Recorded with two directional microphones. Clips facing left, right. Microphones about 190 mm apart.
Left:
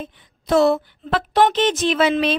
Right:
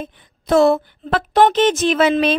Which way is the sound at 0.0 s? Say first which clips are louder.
Right 2 dB; 50° right (ahead or behind).